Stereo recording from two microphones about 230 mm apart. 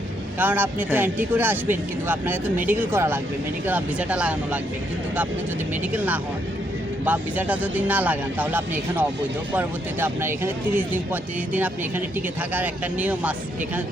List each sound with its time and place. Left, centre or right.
0.3 s speech: centre
7.0 s speech: centre